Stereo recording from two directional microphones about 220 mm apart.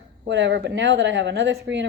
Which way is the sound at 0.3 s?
55° right (ahead or behind).